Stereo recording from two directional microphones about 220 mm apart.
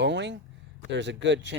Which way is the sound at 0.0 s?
55° right (ahead or behind).